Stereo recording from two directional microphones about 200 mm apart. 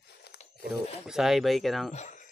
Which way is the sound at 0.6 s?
Centre (ahead or behind).